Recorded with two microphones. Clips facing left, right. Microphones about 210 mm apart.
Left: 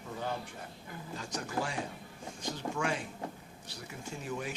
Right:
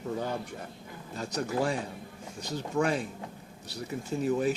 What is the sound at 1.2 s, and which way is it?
Speech, 35° right (ahead or behind).